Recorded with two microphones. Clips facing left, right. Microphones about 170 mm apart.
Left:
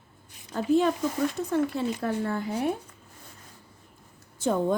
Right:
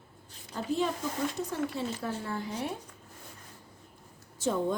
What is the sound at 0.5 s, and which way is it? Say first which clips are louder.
Speech: left 7 dB; 60° left (ahead or behind).